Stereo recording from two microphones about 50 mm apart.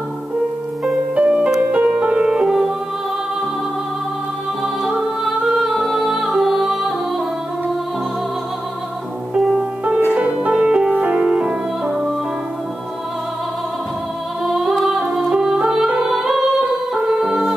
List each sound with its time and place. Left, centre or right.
1.1 s music: right
4.8 s music: centre
9.3 s music: right
14.4 s music: centre